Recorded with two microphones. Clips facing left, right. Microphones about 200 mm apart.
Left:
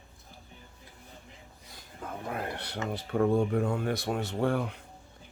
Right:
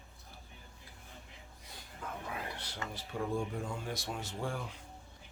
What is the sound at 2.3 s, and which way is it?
Speech, 60° left (ahead or behind).